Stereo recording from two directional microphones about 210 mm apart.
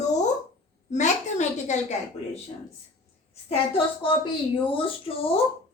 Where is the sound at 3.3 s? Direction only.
30° left (ahead or behind).